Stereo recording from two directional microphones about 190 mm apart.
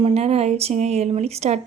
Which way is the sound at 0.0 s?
35° right (ahead or behind).